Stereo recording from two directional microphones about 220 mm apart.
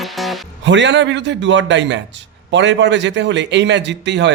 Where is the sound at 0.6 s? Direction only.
55° right (ahead or behind).